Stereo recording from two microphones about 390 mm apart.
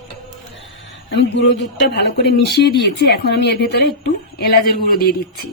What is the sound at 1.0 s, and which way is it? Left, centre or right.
A man's voice, left.